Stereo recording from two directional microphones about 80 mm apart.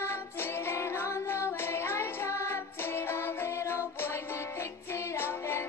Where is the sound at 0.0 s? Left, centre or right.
Left.